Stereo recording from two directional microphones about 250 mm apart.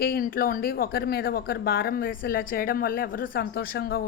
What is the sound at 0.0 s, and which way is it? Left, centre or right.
Speech, left.